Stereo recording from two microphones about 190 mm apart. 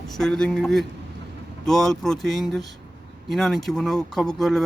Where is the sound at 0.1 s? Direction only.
5° left (ahead or behind).